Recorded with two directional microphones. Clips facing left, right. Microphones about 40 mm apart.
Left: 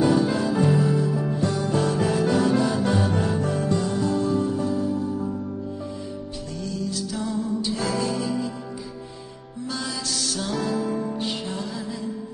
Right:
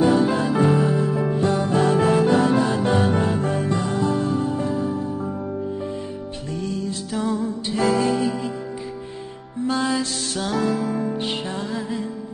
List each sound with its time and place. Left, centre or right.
0.0 s music: right
6.5 s music: right
9.7 s music: right